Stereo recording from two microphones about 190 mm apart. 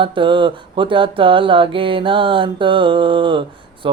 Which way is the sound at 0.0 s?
25° right (ahead or behind).